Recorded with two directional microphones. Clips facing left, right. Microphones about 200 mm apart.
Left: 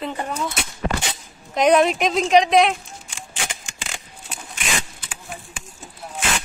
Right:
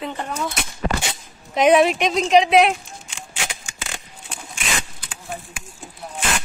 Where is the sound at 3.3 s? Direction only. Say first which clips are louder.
Even; 5° right (ahead or behind).